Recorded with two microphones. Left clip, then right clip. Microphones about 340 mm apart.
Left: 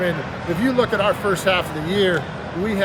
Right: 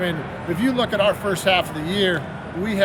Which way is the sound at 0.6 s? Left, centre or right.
Centre.